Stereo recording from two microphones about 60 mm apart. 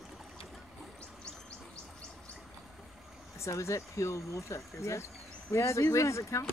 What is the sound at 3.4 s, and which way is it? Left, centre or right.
Speech, left.